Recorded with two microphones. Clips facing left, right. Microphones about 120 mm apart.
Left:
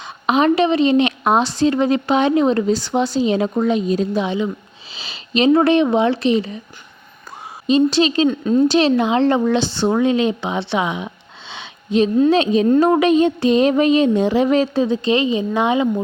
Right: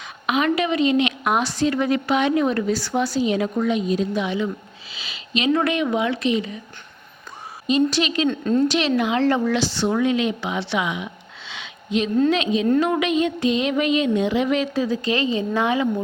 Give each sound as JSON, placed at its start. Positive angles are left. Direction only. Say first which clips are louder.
{"t": 0.0, "sound": "a woman's voice", "louder": "left 6 dB", "side_deg": 30}
{"t": 7.7, "sound": "a woman's voice", "louder": "left 5 dB", "side_deg": 30}
{"t": 8.3, "sound": "a woman's voice", "louder": "left 4 dB", "side_deg": 10}
{"t": 8.6, "sound": "a woman's voice", "louder": "left 5 dB", "side_deg": 30}